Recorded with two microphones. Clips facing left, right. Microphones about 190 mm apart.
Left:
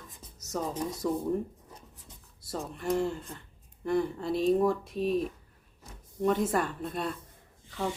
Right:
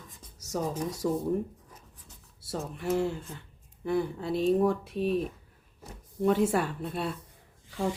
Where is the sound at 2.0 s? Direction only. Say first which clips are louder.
Right 5 dB; 5° right (ahead or behind).